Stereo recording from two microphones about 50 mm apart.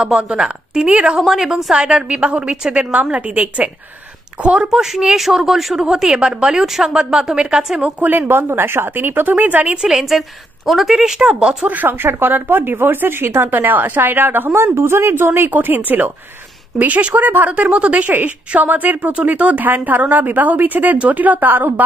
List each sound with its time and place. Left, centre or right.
0.0 s a woman's voice: right
1.2 s a woman's voice: centre; by 4.6 s right
4.6 s a woman's voice: centre
5.9 s a woman's voice: centre
7.8 s speech: right
8.2 s speech: right
9.8 s a woman's voice: centre
11.7 s speech: right
13.5 s speech: right
14.5 s speech: right
17.5 s a woman's voice: right